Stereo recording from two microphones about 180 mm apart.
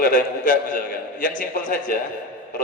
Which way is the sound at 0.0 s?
50° left (ahead or behind).